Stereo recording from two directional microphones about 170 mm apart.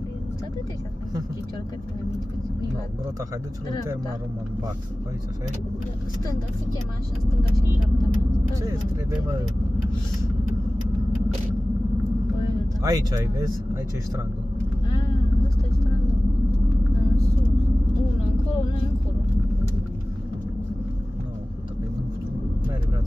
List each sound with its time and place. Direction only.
12.8 s speech: 20° right (ahead or behind)